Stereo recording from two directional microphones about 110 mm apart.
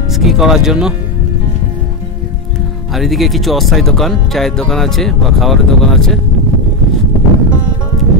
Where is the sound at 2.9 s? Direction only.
Centre (ahead or behind).